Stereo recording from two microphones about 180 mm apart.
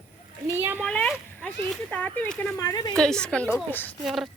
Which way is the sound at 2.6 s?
20° left (ahead or behind).